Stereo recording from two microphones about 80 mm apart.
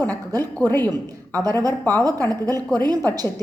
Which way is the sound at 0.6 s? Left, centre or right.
Left.